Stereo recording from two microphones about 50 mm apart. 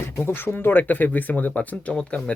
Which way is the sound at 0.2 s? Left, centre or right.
Left.